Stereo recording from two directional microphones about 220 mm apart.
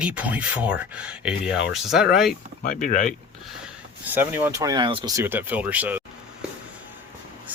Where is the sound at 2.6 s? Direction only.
35° left (ahead or behind).